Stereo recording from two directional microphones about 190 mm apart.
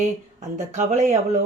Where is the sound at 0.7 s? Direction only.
35° right (ahead or behind).